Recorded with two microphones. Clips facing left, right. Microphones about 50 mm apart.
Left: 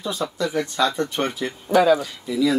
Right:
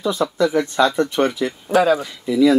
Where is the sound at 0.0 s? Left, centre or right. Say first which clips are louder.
Right 7 dB; right.